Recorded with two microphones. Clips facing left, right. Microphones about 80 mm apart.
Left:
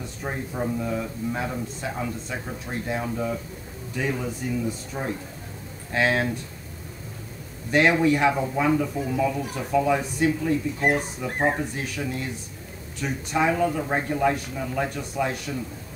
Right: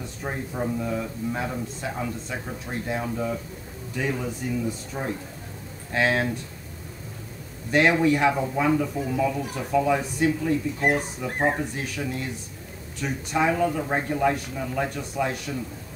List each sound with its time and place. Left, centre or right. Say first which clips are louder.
0.2 s a man's voice: even; centre
7.7 s a man's voice: even; centre